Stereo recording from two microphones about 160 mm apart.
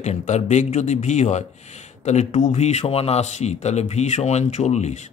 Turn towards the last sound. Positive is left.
turn(degrees=45)  # may be behind; listen again after turning